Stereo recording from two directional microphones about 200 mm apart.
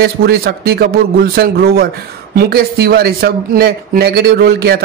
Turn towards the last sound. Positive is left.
turn(degrees=-50)  # may be behind; listen again after turning